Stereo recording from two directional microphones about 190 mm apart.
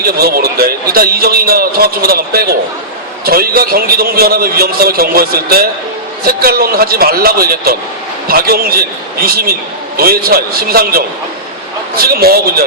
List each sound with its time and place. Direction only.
0.0 s a man's voice: 55° right (ahead or behind)